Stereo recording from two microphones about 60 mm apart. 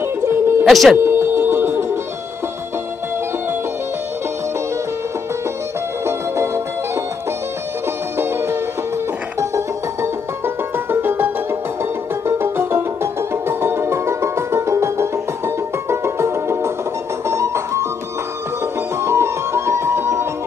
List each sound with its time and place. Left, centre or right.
0.2 s music: right
0.7 s speech: centre
0.9 s music: right
6.0 s music: right
8.2 s music: right
10.4 s music: right
18.9 s music: right